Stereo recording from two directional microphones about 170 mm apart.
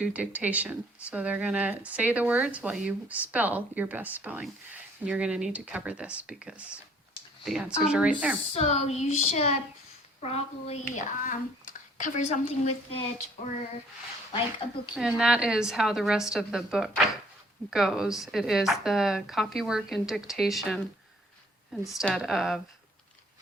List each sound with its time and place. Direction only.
0.0 s speech: 10° right (ahead or behind)
8.4 s a woman's voice: 40° left (ahead or behind)
14.9 s speech: 5° right (ahead or behind)